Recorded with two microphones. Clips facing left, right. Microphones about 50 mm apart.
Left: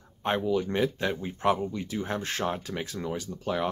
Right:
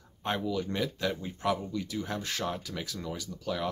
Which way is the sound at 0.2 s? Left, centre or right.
Left.